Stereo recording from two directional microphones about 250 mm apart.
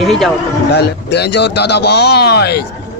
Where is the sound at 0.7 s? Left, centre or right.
Left.